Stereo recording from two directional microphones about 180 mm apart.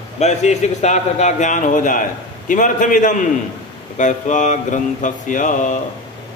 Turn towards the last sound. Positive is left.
turn(degrees=45)  # may be behind; listen again after turning